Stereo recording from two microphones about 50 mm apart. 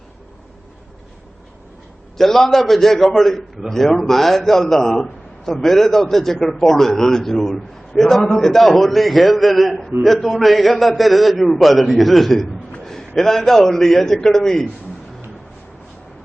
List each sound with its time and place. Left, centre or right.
2.1 s a man's voice: centre